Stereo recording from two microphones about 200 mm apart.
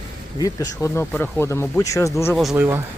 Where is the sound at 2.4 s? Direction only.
5° right (ahead or behind).